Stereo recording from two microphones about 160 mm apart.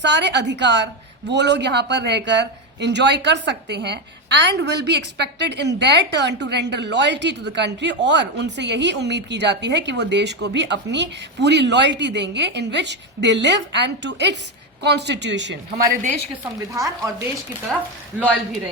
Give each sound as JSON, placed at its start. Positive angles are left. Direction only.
{"t": 0.0, "sound": "speech", "side_deg": -90}
{"t": 16.4, "sound": "a woman's voice", "side_deg": -20}
{"t": 17.7, "sound": "speech", "side_deg": 0}